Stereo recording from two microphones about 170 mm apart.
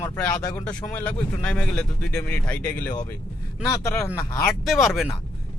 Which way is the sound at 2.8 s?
20° left (ahead or behind).